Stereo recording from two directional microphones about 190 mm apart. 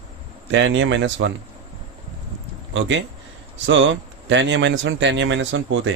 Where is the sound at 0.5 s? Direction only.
75° right (ahead or behind).